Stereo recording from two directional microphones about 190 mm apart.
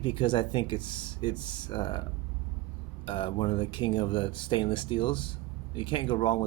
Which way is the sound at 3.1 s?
25° left (ahead or behind).